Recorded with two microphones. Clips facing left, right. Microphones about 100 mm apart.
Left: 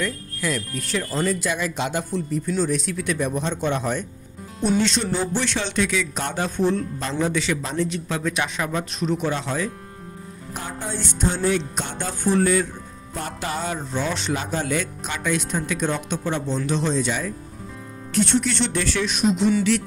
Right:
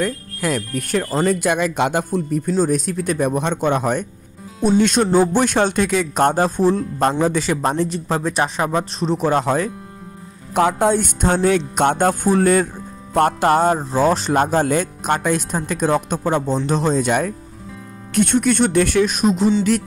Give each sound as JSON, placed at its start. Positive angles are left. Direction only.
{"t": 0.0, "sound": "speech", "side_deg": -50}
{"t": 7.0, "sound": "speech", "side_deg": -50}
{"t": 7.9, "sound": "speech", "side_deg": -35}
{"t": 9.3, "sound": "speech", "side_deg": -50}
{"t": 10.5, "sound": "music", "side_deg": -80}
{"t": 13.1, "sound": "speech", "side_deg": -60}